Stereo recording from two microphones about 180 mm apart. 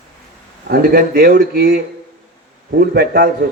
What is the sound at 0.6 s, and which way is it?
Speech, 55° right (ahead or behind).